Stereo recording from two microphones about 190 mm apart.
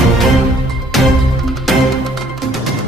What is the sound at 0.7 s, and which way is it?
Music, centre (ahead or behind).